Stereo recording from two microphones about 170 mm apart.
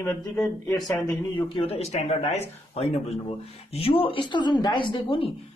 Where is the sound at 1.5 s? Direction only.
35° left (ahead or behind).